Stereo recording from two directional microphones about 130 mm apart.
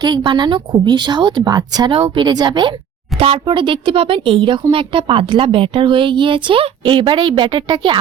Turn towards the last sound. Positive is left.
turn(degrees=-40)  # may be behind; listen again after turning